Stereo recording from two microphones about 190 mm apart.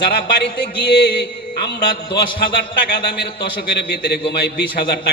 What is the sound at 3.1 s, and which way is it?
A man's voice, 60° left (ahead or behind).